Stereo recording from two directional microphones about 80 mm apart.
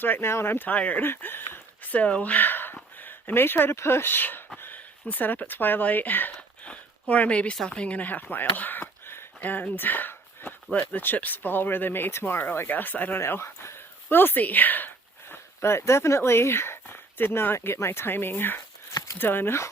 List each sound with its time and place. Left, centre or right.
0.0 s speech: left